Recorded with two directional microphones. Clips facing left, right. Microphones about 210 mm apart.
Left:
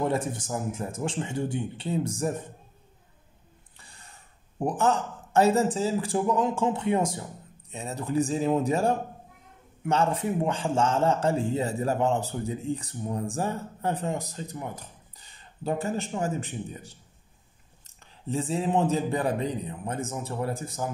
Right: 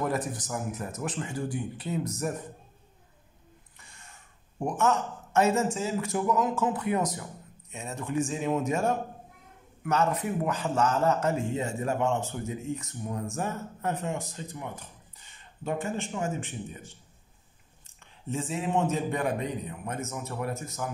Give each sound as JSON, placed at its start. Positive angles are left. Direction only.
{"t": 0.0, "sound": "a man's voice", "side_deg": 25}
{"t": 3.7, "sound": "a man's voice", "side_deg": 35}